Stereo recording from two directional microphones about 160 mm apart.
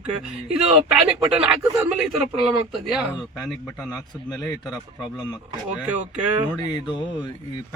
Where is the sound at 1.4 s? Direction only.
5° right (ahead or behind).